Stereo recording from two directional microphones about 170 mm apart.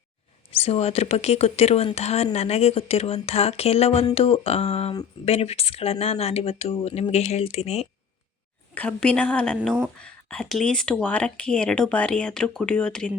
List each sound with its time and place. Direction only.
0.5 s speech: 35° left (ahead or behind)
8.7 s a woman's voice: 10° left (ahead or behind)